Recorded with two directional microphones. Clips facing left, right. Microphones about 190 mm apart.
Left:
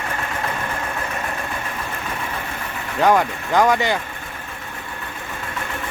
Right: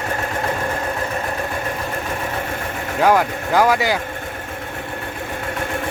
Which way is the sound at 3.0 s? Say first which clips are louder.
Right 1 dB; 5° right (ahead or behind).